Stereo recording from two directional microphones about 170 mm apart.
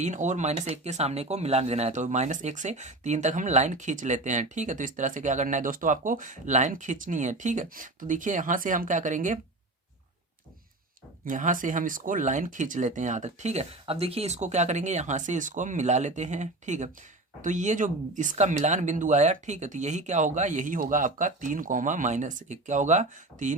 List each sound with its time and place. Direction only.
0.0 s speech: 45° right (ahead or behind)
11.3 s speech: 50° right (ahead or behind)